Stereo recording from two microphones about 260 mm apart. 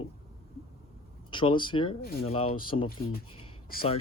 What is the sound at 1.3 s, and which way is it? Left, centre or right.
Speech, centre.